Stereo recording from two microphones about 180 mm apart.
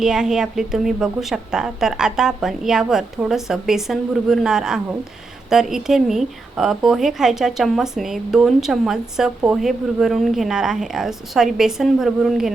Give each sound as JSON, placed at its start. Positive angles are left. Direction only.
{"t": 0.0, "sound": "a woman's voice", "side_deg": -5}